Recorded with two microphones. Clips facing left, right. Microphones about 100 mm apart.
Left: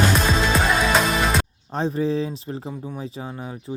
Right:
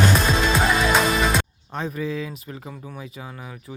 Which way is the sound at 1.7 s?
30° left (ahead or behind).